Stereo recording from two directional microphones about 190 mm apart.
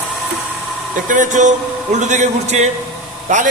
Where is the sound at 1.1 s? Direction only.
40° right (ahead or behind).